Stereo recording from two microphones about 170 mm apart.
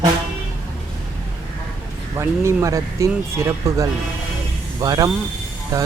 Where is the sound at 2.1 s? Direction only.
15° right (ahead or behind).